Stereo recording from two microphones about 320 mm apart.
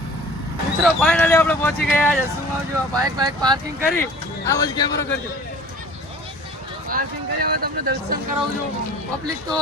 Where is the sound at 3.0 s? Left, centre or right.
Centre.